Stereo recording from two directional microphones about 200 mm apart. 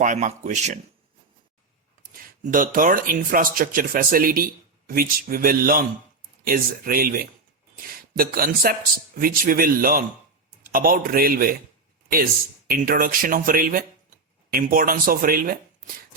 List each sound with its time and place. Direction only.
0.0 s speech: 40° right (ahead or behind)
2.4 s speech: 40° right (ahead or behind)